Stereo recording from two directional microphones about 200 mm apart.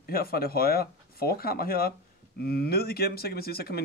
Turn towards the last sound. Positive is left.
turn(degrees=50)  # may be behind; listen again after turning